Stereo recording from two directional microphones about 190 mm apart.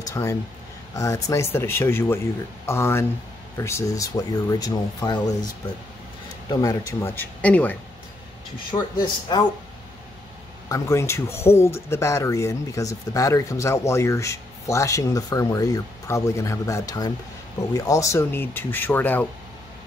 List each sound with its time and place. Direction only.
0.1 s speech: 15° left (ahead or behind)
6.5 s speech: 15° left (ahead or behind)
9.0 s speech: 20° left (ahead or behind)
10.7 s speech: 15° left (ahead or behind)